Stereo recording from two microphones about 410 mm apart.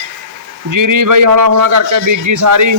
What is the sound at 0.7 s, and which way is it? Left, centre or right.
Speech, right.